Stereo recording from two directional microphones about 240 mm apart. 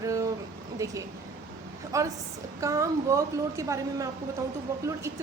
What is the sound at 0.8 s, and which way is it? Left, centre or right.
Speech, centre.